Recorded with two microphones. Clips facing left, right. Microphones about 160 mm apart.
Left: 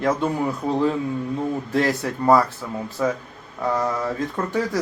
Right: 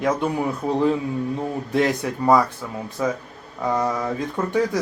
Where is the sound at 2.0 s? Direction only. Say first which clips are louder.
Even; 5° left (ahead or behind).